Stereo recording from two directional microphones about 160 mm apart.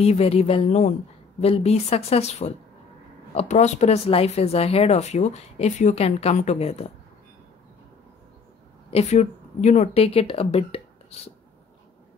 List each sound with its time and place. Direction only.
0.0 s a woman's voice: 40° left (ahead or behind)
8.9 s a woman's voice: 45° left (ahead or behind)